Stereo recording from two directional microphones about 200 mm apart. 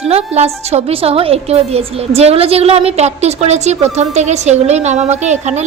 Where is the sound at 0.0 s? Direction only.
30° right (ahead or behind).